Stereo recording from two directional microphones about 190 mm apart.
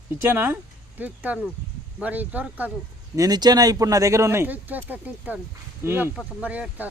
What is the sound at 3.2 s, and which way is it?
Speech, 20° right (ahead or behind).